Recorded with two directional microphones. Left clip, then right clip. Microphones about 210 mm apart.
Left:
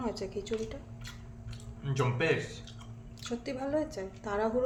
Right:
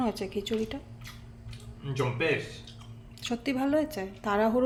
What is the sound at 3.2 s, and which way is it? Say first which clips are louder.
A woman's voice: right 6 dB; 40° right (ahead or behind).